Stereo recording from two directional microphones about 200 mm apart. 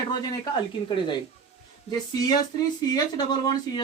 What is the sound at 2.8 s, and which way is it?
Speech, 20° left (ahead or behind).